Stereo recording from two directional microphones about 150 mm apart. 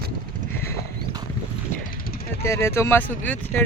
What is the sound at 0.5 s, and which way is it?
Clip-clop, 15° left (ahead or behind).